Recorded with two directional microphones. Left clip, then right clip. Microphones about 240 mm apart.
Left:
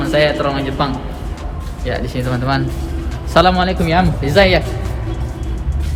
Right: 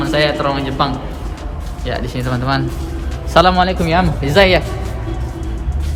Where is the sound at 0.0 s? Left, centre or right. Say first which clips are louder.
Left 1 dB; centre.